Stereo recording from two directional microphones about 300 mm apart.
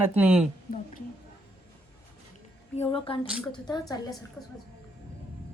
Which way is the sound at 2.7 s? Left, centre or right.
Centre.